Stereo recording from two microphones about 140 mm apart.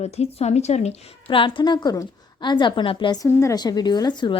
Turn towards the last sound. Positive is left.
turn(degrees=30)  # may be behind; listen again after turning